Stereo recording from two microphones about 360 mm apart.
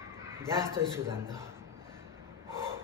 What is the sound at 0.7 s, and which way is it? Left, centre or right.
Speech, centre.